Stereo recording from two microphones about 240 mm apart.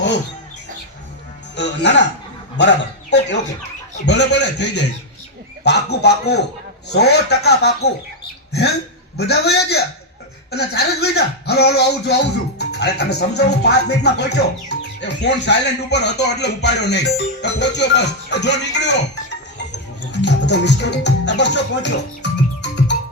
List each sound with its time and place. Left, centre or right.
1.5 s speech: left
9.1 s speech: left